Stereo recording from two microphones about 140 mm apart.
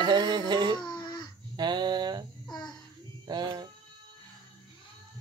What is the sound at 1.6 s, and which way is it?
Speech, 30° right (ahead or behind).